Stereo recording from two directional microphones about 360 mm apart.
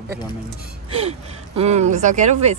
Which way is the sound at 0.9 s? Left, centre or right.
Centre.